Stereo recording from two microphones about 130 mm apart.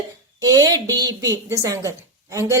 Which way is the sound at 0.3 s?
30° right (ahead or behind).